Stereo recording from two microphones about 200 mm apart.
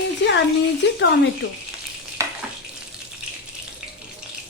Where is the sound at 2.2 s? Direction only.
15° right (ahead or behind).